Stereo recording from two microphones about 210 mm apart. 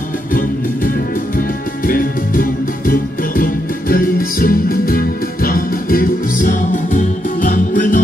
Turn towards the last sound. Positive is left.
turn(degrees=40)  # may be behind; listen again after turning